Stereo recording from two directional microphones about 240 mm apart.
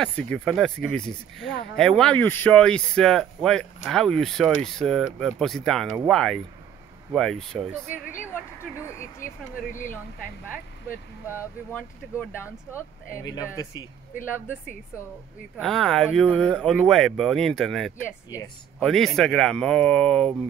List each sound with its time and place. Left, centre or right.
0.0 s speech: centre
9.2 s speech: left
13.2 s speech: centre
15.5 s speech: centre